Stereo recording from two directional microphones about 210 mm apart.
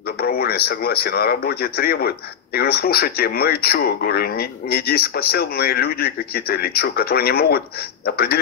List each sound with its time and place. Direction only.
0.2 s speech: 50° left (ahead or behind)